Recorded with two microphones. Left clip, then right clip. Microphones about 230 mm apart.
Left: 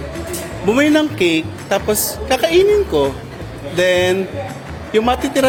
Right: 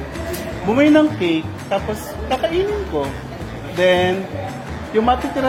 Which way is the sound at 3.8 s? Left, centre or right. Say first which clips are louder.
Left 1 dB; left.